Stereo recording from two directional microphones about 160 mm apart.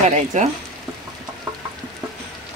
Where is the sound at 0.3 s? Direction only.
50° right (ahead or behind).